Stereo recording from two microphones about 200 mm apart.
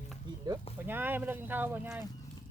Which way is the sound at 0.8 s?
10° right (ahead or behind).